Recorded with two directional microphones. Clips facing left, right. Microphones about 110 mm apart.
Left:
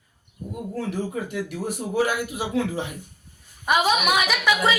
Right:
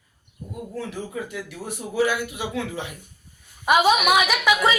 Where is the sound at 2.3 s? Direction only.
35° left (ahead or behind).